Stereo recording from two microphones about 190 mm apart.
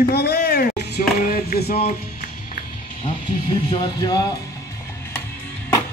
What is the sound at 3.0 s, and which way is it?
Speech, 25° left (ahead or behind).